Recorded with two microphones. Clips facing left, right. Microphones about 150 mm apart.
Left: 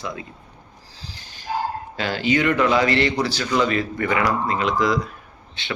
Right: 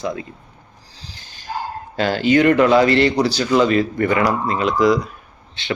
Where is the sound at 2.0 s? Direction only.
40° right (ahead or behind).